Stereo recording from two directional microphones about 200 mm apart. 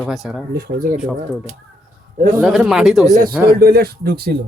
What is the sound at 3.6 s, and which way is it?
Speech, 50° right (ahead or behind).